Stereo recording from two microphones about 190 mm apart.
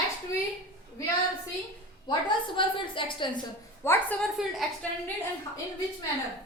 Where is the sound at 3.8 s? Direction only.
10° left (ahead or behind).